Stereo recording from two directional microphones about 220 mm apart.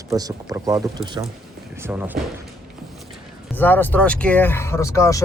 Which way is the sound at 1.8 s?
10° right (ahead or behind).